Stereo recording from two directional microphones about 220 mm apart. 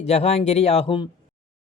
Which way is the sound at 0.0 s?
30° left (ahead or behind).